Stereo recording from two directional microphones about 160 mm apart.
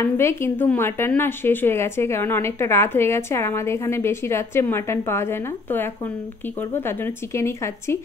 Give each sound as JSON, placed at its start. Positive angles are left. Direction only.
{"t": 0.0, "sound": "a woman's voice", "side_deg": 15}